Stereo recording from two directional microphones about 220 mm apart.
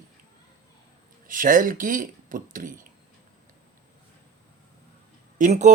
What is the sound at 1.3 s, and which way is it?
Speech, 40° right (ahead or behind).